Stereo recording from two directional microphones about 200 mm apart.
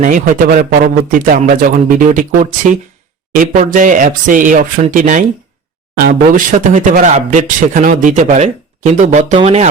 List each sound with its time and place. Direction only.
0.0 s a man's voice: 40° right (ahead or behind)